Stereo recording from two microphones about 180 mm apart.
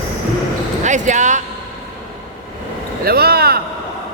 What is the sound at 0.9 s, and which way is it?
Speech, 45° right (ahead or behind).